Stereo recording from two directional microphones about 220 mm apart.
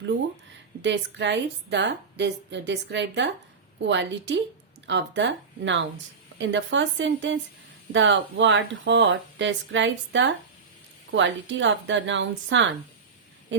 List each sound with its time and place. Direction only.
0.8 s a woman's voice: 55° right (ahead or behind)